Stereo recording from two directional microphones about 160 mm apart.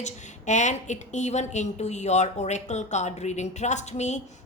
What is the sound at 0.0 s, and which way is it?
A woman's voice, 50° left (ahead or behind).